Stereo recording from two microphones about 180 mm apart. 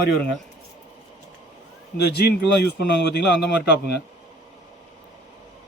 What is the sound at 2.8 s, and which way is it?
Speech, 65° left (ahead or behind).